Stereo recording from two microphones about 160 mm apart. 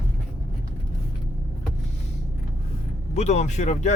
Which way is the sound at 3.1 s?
45° left (ahead or behind).